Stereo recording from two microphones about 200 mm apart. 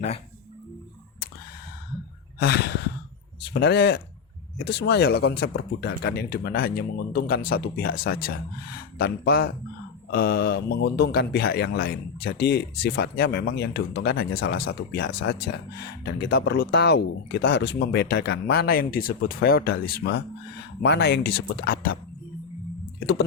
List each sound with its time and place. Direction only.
2.4 s speech: 55° left (ahead or behind)